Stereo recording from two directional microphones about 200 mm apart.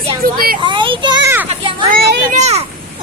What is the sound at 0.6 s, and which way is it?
Speech, 25° right (ahead or behind).